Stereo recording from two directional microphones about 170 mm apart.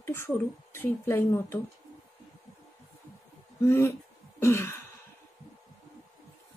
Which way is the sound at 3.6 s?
15° left (ahead or behind).